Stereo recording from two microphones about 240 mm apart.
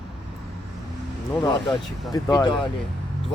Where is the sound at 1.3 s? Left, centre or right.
Centre.